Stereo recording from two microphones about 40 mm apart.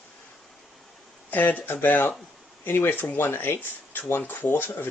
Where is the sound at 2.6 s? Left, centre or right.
Left.